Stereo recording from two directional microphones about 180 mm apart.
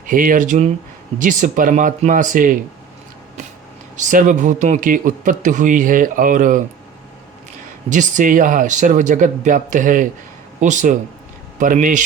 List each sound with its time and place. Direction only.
0.1 s speech: 50° right (ahead or behind)
3.9 s speech: 45° right (ahead or behind)
7.9 s speech: 45° right (ahead or behind)